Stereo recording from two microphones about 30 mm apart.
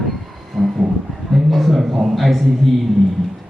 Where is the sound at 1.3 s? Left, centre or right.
Centre.